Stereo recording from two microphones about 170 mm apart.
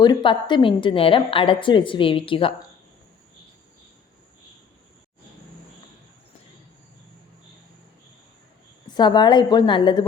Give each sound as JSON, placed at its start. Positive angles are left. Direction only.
{"t": 0.0, "sound": "a woman's voice", "side_deg": 25}
{"t": 8.9, "sound": "a woman's voice", "side_deg": 25}